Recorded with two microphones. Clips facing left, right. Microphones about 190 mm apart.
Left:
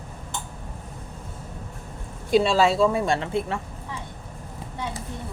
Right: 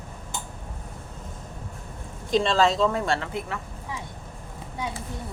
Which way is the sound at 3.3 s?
30° left (ahead or behind).